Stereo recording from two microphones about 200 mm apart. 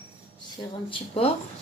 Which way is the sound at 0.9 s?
30° left (ahead or behind).